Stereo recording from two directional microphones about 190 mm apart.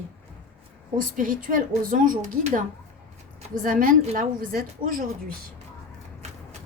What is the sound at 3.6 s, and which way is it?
A woman's voice, 45° right (ahead or behind).